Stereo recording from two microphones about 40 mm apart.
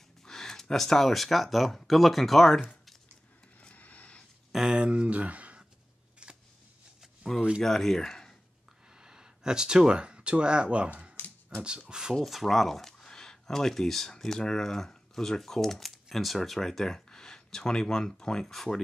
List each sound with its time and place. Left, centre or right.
0.2 s speech: centre
3.7 s a sound: left
4.5 s a sound: centre
4.7 s speech: right
6.2 s scissors: right
7.6 s speech: centre
8.9 s speech: centre
11.2 s a sound: left
11.9 s speech: centre
12.3 s speech: centre
18.4 s speech: centre